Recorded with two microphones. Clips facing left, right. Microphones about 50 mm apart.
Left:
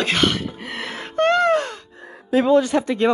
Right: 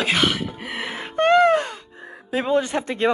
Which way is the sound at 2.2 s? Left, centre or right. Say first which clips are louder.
Left 5 dB; right.